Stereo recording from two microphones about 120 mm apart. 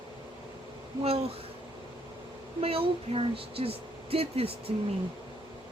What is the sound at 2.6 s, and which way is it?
Speech, 50° right (ahead or behind).